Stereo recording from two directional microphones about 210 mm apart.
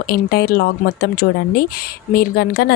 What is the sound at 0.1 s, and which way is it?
Speech, 45° left (ahead or behind).